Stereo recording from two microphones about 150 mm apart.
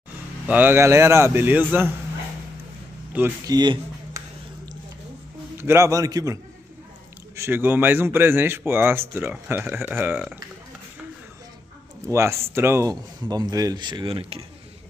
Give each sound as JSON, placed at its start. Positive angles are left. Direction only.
{"t": 0.5, "sound": "a man's voice", "side_deg": -15}
{"t": 3.1, "sound": "a sound", "side_deg": -10}
{"t": 3.4, "sound": "speech", "side_deg": -30}
{"t": 5.6, "sound": "a man's voice", "side_deg": -15}
{"t": 12.1, "sound": "speech", "side_deg": -20}